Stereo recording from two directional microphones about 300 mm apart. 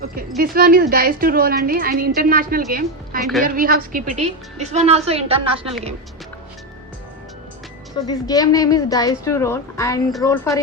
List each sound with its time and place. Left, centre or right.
0.0 s a woman's voice: right
8.0 s a woman's voice: centre